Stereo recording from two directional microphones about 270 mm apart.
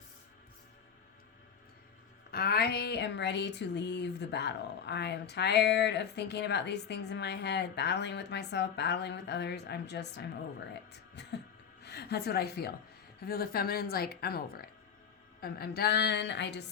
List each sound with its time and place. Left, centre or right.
2.3 s a woman's voice: left